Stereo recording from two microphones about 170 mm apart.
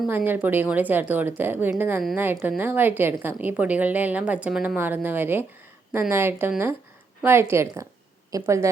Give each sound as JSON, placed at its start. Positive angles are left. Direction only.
{"t": 0.1, "sound": "a woman's voice", "side_deg": -10}